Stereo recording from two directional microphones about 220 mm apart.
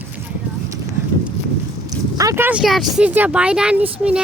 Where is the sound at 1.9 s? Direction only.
15° right (ahead or behind).